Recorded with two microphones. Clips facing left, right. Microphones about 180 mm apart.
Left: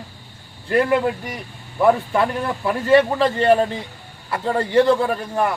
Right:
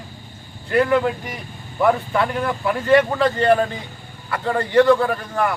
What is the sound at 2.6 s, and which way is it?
A man's voice, 25° left (ahead or behind).